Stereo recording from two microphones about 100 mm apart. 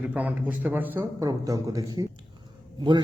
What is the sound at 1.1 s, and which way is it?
Speech, 35° right (ahead or behind).